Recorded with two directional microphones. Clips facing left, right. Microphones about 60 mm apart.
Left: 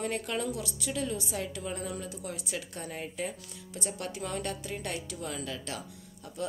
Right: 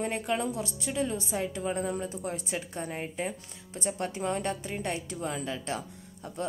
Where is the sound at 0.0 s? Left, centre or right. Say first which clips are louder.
Right 3 dB; right.